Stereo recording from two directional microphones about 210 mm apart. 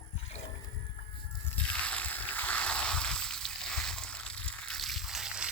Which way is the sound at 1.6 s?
5° left (ahead or behind).